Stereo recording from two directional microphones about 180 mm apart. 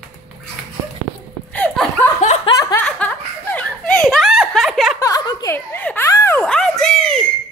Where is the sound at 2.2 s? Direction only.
40° left (ahead or behind).